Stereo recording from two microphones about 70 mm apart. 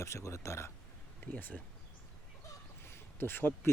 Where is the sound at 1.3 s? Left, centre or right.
Left.